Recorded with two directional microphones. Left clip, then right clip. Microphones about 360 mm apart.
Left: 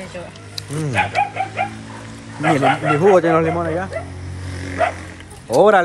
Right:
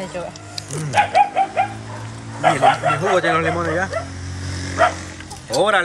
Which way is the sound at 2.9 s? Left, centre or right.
Centre.